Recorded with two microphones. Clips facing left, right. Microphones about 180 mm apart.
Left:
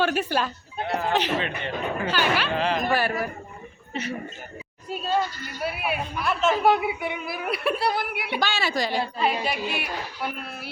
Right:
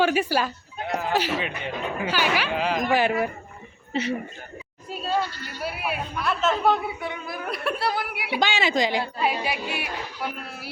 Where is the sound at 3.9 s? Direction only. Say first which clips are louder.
Right 5 dB; 30° right (ahead or behind).